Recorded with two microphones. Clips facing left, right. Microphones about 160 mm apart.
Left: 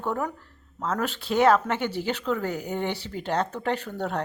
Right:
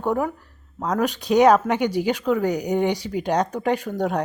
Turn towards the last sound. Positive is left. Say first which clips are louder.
# right 6 dB
turn(degrees=-10)  # may be behind; listen again after turning